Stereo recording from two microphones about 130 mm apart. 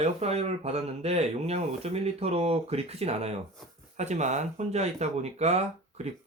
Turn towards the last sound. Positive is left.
turn(degrees=-55)  # may be behind; listen again after turning